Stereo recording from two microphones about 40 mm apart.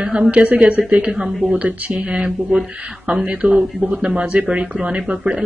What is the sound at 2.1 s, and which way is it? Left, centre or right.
A woman's voice, right.